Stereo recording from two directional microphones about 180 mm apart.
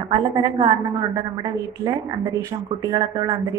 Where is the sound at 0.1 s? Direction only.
25° right (ahead or behind).